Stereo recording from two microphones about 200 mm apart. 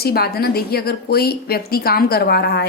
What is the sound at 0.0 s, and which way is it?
A woman's voice, 50° left (ahead or behind).